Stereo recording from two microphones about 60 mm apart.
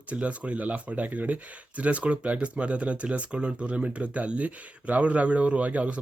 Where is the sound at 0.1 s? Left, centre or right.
Right.